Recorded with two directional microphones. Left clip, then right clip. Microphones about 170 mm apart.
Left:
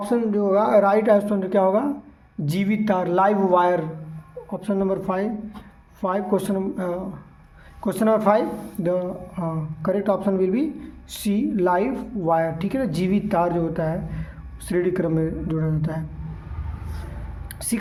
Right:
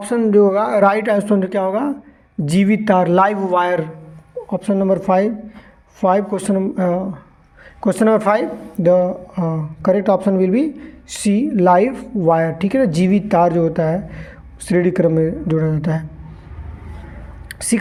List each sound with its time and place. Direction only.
0.0 s speech: 40° right (ahead or behind)
17.5 s whispering: 35° right (ahead or behind)